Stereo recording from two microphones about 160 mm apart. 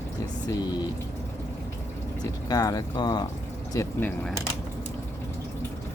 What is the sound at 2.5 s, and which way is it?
Speech, 25° left (ahead or behind).